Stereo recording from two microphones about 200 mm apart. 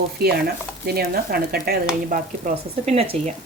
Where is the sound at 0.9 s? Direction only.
50° right (ahead or behind).